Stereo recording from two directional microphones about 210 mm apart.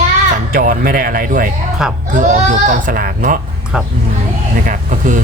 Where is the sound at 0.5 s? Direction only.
45° right (ahead or behind).